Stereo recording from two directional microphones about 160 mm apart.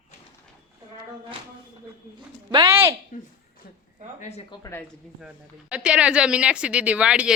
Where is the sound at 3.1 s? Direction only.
55° left (ahead or behind).